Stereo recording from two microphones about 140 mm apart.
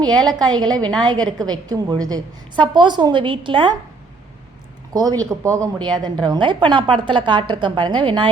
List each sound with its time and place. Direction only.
0.0 s a woman's voice: 30° right (ahead or behind)
4.9 s a woman's voice: 25° right (ahead or behind)